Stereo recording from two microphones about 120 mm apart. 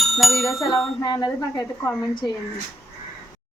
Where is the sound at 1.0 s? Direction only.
35° left (ahead or behind).